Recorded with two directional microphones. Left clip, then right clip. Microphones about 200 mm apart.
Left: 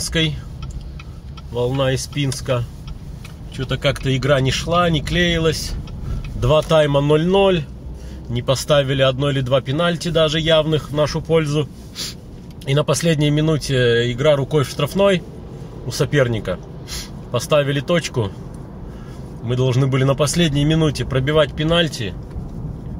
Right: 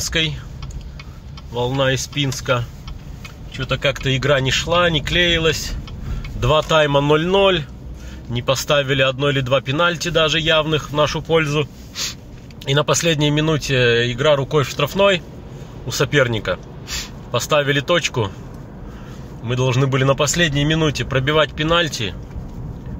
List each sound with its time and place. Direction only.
0.0 s speech: 10° left (ahead or behind)
1.5 s speech: 5° left (ahead or behind)
19.4 s speech: 10° left (ahead or behind)